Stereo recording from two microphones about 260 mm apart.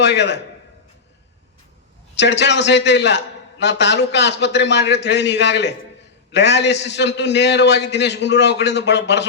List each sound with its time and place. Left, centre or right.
0.0 s a man's voice: left
2.1 s a man's voice: left